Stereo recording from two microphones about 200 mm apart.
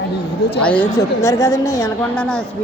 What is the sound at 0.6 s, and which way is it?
A woman's voice, 5° left (ahead or behind).